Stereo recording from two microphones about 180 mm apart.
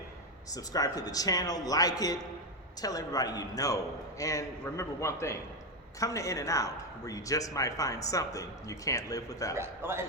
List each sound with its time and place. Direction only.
0.5 s a man's voice: 20° left (ahead or behind)
9.6 s a man's voice: 15° right (ahead or behind)